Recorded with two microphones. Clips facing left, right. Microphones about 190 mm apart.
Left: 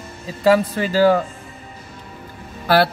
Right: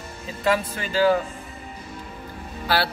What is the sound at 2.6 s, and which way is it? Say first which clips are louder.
Speech: left 8 dB; 50° left (ahead or behind).